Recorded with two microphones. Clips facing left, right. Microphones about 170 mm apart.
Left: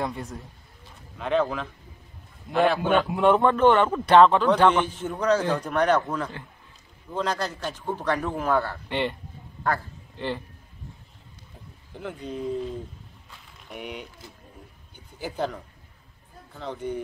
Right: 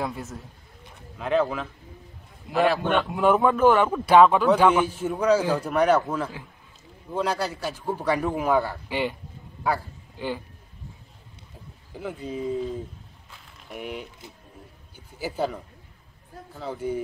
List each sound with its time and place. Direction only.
0.0 s a man's voice: 5° right (ahead or behind)
11.9 s speech: 5° right (ahead or behind)
13.3 s vehicle: centre (ahead or behind)
15.1 s speech: 5° right (ahead or behind)